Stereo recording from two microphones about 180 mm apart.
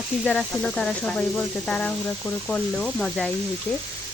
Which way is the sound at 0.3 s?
5° left (ahead or behind).